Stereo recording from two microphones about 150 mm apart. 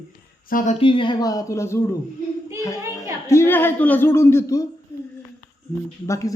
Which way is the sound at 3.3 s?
15° left (ahead or behind).